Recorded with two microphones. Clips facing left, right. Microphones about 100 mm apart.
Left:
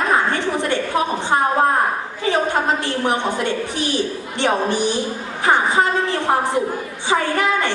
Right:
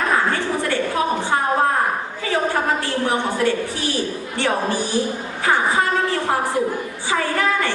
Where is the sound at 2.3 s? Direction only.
20° left (ahead or behind).